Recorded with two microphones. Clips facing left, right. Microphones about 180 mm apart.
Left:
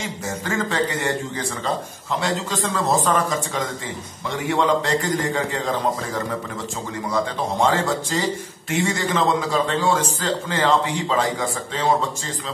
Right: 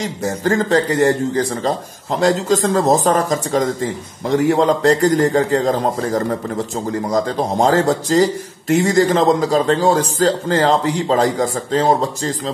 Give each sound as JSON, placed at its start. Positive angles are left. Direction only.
{"t": 0.0, "sound": "speech", "side_deg": -35}